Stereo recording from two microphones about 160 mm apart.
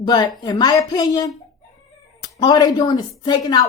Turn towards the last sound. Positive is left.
turn(degrees=25)  # may be behind; listen again after turning